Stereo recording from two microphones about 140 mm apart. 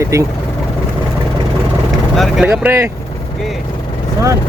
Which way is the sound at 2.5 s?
15° right (ahead or behind).